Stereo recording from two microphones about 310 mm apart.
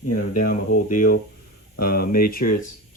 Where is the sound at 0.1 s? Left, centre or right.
Left.